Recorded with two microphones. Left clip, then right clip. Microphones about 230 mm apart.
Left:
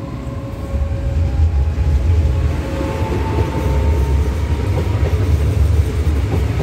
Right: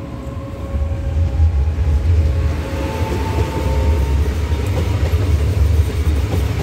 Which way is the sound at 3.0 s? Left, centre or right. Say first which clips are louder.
Left 1 dB; right.